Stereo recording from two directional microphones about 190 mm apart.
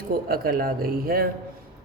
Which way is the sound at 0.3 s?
50° right (ahead or behind).